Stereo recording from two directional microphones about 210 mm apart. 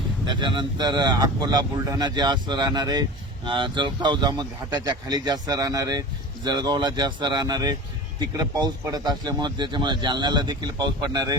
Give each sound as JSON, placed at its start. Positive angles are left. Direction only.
{"t": 0.3, "sound": "speech", "side_deg": -20}